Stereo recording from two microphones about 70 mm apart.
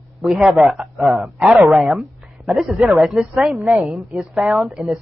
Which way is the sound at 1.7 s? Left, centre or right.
Centre.